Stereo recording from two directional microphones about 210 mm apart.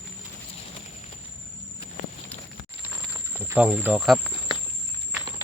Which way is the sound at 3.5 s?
10° right (ahead or behind).